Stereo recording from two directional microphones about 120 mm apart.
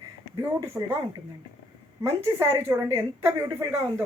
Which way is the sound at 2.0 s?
25° right (ahead or behind).